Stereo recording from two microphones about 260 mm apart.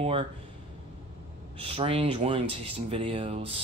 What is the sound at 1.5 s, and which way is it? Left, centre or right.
Speech, right.